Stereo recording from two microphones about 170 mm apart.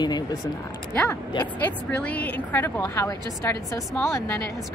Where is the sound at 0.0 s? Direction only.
25° left (ahead or behind).